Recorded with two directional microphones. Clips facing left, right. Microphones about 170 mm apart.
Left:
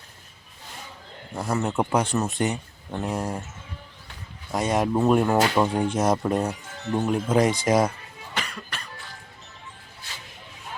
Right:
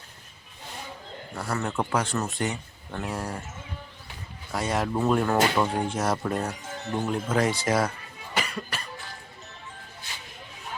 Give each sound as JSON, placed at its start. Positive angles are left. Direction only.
{"t": 1.4, "sound": "speech", "side_deg": 20}
{"t": 4.5, "sound": "speech", "side_deg": 20}
{"t": 8.4, "sound": "cough", "side_deg": -5}